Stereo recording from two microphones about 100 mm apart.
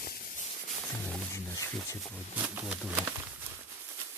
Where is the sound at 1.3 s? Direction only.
30° left (ahead or behind).